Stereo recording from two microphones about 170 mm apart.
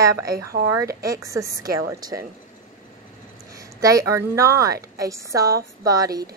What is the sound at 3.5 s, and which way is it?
A woman's voice, 20° right (ahead or behind).